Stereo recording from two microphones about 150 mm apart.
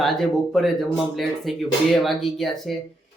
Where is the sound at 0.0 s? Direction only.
Centre (ahead or behind).